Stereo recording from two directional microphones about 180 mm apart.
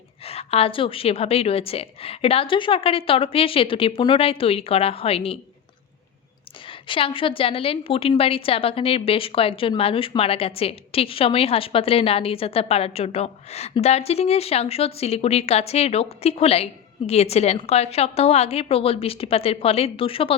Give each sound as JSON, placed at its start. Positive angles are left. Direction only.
{"t": 0.3, "sound": "a woman's voice", "side_deg": 35}
{"t": 6.7, "sound": "a woman's voice", "side_deg": 30}